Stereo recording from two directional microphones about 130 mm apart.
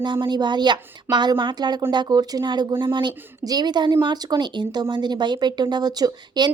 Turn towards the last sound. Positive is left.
turn(degrees=-30)  # may be behind; listen again after turning